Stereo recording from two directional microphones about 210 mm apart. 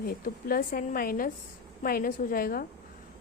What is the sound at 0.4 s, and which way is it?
A woman's voice, 45° left (ahead or behind).